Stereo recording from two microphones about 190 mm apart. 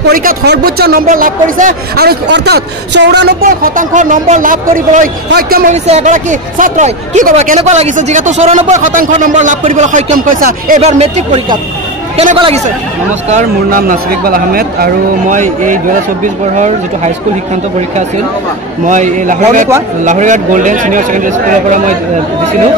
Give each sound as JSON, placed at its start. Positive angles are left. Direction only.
{"t": 0.0, "sound": "speech", "side_deg": -45}
{"t": 5.9, "sound": "speech", "side_deg": -40}
{"t": 10.8, "sound": "speech", "side_deg": -35}
{"t": 12.4, "sound": "speech", "side_deg": -35}
{"t": 18.9, "sound": "speech", "side_deg": -40}